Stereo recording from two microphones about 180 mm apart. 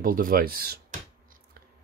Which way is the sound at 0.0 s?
50° right (ahead or behind).